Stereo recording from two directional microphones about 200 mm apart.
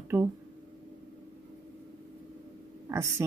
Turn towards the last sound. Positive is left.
turn(degrees=-15)  # may be behind; listen again after turning